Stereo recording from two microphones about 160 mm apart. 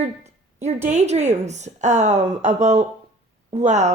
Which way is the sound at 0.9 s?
45° right (ahead or behind).